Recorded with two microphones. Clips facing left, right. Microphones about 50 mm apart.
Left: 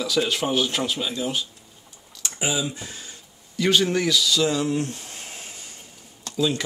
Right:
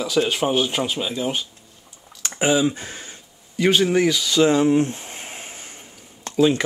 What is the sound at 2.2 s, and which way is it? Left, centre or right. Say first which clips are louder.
Speech: right 8 dB; right.